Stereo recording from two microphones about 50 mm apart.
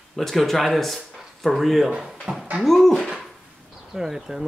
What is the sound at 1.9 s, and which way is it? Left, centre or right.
Speech, centre.